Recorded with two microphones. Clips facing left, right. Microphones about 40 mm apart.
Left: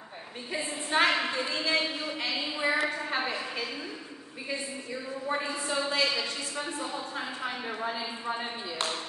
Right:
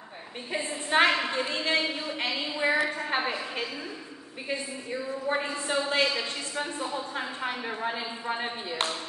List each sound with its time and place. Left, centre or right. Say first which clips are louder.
0.5 s a woman's voice: right 3 dB; right
5.3 s speech: right 1 dB; right
7.8 s speech: even; right